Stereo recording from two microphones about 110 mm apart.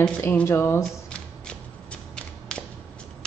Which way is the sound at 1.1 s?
10° left (ahead or behind).